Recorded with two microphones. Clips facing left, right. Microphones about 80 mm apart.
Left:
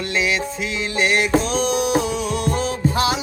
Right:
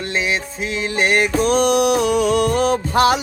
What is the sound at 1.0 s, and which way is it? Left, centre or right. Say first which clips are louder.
Music: right 1 dB; right.